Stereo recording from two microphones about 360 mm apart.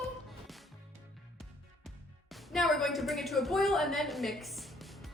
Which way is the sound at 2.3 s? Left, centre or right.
Centre.